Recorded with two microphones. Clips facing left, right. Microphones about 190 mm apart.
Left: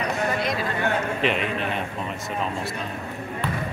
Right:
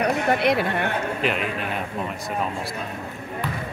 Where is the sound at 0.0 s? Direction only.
65° right (ahead or behind).